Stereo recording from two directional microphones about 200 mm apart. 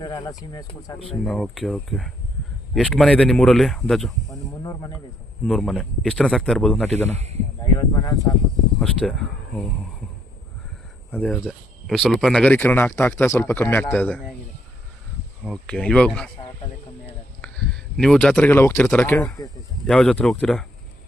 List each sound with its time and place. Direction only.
0.0 s speech: 20° left (ahead or behind)
1.2 s speech: 5° left (ahead or behind)
4.3 s snake: 15° left (ahead or behind)
5.5 s speech: centre (ahead or behind)
7.1 s speech: 30° right (ahead or behind)
7.6 s speech: 20° left (ahead or behind)
8.8 s speech: 5° left (ahead or behind)
11.1 s speech: 5° left (ahead or behind)
15.4 s speech: 5° left (ahead or behind)
17.4 s speech: 5° left (ahead or behind)